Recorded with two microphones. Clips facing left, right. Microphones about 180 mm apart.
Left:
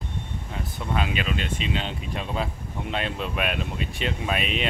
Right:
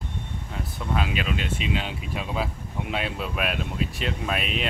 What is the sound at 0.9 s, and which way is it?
Speech, centre (ahead or behind).